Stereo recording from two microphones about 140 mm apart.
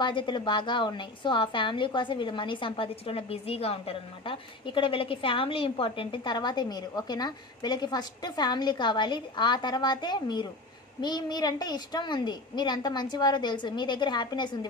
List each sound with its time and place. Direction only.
0.0 s a woman's voice: 35° left (ahead or behind)